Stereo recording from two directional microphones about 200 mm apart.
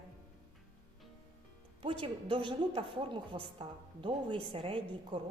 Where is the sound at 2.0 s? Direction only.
25° right (ahead or behind).